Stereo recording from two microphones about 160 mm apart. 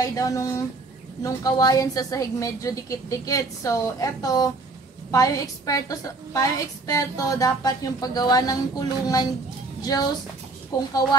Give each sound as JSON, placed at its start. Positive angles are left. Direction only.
{"t": 0.0, "sound": "a woman's voice", "side_deg": 20}